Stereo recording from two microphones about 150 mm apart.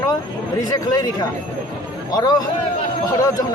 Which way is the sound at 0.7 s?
25° left (ahead or behind).